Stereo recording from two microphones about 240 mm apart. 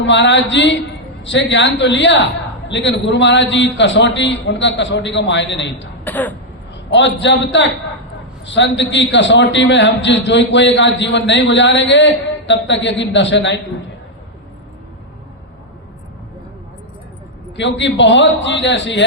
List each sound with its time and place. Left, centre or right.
0.0 s a man's voice: left
6.1 s throat clearing: centre
6.9 s a man's voice: left
17.6 s a man's voice: left